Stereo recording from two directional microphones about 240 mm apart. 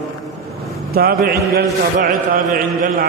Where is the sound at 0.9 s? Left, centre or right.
Right.